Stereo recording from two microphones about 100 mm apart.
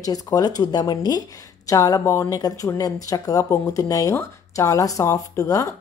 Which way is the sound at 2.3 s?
40° left (ahead or behind).